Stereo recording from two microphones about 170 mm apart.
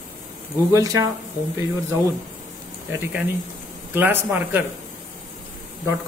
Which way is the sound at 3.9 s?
15° right (ahead or behind).